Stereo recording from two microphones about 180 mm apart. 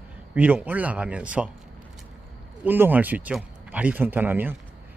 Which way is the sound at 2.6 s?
10° right (ahead or behind).